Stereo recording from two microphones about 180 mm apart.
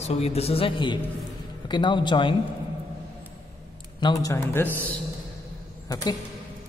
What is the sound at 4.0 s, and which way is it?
Speech, 25° left (ahead or behind).